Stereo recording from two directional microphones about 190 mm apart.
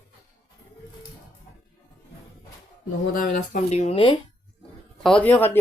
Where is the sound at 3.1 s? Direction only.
45° left (ahead or behind); by 4.2 s 30° left (ahead or behind).